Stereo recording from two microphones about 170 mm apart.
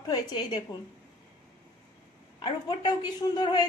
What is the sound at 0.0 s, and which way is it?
Speech, 25° left (ahead or behind).